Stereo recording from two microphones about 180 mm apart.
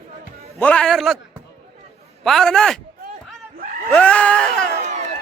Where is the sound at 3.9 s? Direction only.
5° left (ahead or behind).